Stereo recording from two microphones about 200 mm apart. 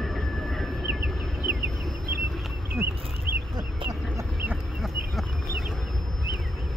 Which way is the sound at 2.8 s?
15° right (ahead or behind).